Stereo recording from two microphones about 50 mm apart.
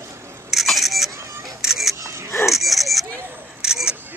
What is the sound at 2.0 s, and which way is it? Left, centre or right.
Filing, right.